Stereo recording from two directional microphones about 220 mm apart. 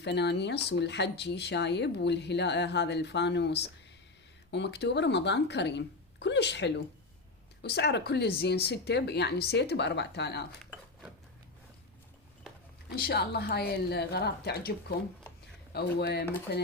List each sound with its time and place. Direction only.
0.0 s speech: 50° left (ahead or behind)
13.0 s speech: 45° left (ahead or behind)